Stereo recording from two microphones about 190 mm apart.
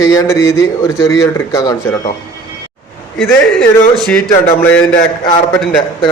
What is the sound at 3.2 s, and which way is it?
A man's voice, 5° left (ahead or behind).